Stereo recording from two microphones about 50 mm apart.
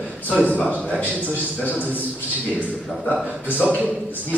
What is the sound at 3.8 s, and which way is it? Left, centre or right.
Speech, right.